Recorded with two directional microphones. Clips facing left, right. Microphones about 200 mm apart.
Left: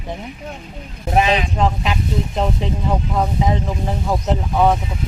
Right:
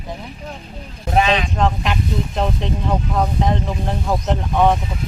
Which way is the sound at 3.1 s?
5° left (ahead or behind).